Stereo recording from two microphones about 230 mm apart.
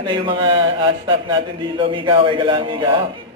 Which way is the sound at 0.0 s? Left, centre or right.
Right.